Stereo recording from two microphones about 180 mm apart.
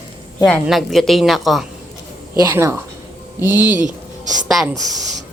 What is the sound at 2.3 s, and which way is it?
A woman's voice, 20° right (ahead or behind).